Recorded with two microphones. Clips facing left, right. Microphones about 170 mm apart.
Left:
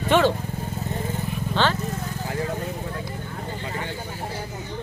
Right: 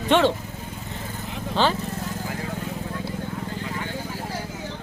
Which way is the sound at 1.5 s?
90° right.